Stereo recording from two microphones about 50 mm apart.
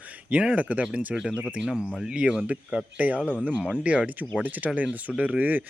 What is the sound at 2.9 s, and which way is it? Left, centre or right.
Speech, right.